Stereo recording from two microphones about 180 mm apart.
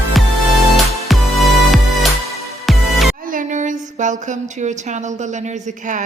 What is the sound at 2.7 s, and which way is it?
Music, centre (ahead or behind).